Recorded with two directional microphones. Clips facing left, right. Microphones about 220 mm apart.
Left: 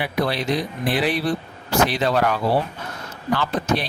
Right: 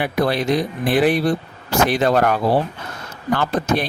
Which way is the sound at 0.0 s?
50° right (ahead or behind).